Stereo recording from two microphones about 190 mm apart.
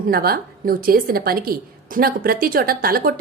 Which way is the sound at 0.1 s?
50° right (ahead or behind).